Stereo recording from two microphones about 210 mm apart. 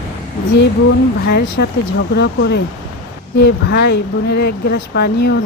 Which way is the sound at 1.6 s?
50° left (ahead or behind).